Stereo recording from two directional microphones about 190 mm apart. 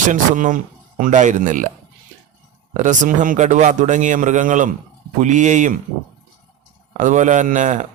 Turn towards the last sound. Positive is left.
turn(degrees=-40)  # may be behind; listen again after turning